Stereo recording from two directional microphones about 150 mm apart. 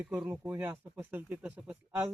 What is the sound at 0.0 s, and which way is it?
Speech, 10° right (ahead or behind).